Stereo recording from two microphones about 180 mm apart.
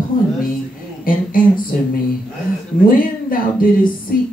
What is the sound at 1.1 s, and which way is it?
Speech, 50° left (ahead or behind).